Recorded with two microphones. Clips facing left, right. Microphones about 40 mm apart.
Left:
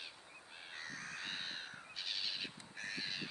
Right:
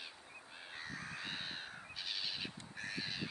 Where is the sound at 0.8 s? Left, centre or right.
Centre.